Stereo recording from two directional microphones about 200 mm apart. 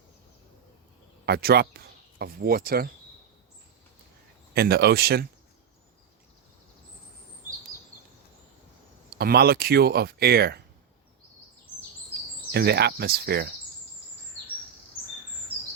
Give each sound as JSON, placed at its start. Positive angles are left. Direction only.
{"t": 1.2, "sound": "speech", "side_deg": -50}
{"t": 4.5, "sound": "speech", "side_deg": -50}
{"t": 9.1, "sound": "speech", "side_deg": -50}
{"t": 12.5, "sound": "speech", "side_deg": -55}